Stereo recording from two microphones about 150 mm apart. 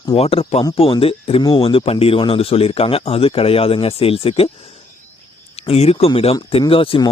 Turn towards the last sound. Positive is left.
turn(degrees=35)  # may be behind; listen again after turning